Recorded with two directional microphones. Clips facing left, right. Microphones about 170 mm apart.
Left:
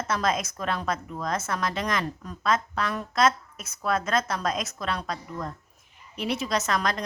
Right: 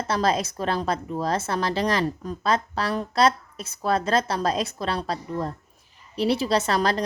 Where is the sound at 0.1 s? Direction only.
30° right (ahead or behind).